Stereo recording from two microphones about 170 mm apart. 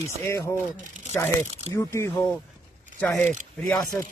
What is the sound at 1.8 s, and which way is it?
Speech, 15° left (ahead or behind).